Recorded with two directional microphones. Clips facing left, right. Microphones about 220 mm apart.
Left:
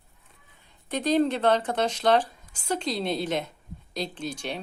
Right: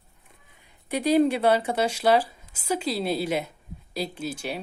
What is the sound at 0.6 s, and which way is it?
A woman's voice, 10° right (ahead or behind).